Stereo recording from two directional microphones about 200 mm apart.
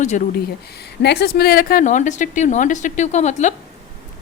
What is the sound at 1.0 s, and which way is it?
A woman's voice, 55° left (ahead or behind).